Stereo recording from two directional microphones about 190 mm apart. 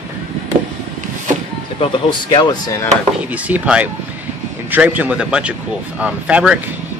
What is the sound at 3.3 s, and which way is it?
Speech, 5° right (ahead or behind).